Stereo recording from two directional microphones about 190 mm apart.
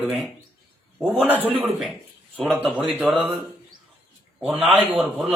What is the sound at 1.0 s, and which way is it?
Speech, centre (ahead or behind).